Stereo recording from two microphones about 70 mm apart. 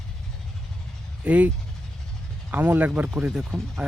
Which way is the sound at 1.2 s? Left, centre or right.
Centre.